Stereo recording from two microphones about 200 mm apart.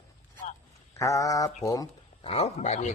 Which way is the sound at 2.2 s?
30° left (ahead or behind).